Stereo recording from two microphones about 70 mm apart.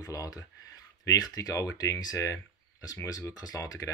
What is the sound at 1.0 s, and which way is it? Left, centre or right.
Speech, left.